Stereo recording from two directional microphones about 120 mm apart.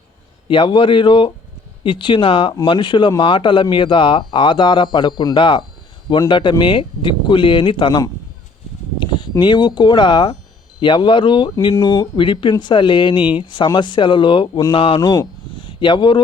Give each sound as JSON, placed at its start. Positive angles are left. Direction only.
{"t": 0.4, "sound": "speech", "side_deg": 45}
{"t": 9.0, "sound": "a sound", "side_deg": 40}
{"t": 9.4, "sound": "speech", "side_deg": 40}